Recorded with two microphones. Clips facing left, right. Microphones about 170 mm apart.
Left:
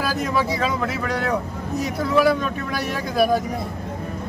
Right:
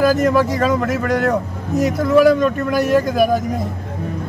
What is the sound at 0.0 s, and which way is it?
Speech, 45° right (ahead or behind).